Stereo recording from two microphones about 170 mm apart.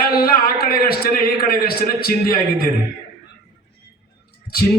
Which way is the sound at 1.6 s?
65° left (ahead or behind).